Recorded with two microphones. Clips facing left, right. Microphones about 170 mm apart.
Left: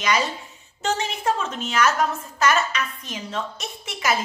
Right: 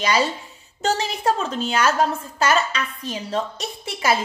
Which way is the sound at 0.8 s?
35° right (ahead or behind).